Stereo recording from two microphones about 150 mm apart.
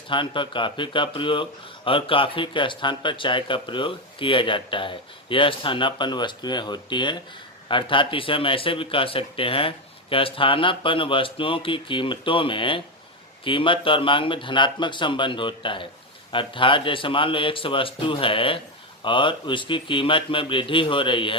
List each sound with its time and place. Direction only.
0.1 s speech: 35° left (ahead or behind)